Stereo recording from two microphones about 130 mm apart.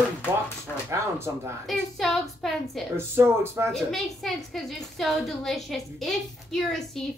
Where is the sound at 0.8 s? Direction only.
20° right (ahead or behind).